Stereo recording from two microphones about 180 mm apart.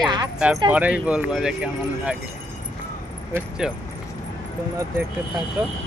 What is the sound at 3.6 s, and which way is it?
Speech, 5° right (ahead or behind).